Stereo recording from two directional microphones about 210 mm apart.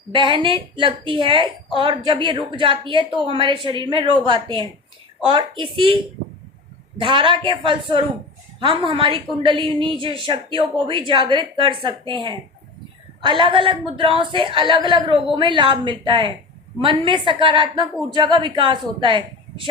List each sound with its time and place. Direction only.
0.1 s a woman's voice: 25° right (ahead or behind)
7.0 s a woman's voice: 25° right (ahead or behind)